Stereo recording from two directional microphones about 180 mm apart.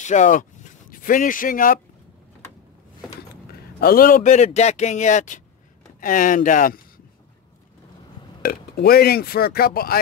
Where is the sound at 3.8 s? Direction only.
55° left (ahead or behind).